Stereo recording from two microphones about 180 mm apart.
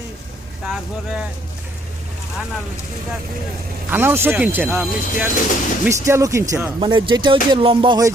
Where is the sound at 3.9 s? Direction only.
10° right (ahead or behind).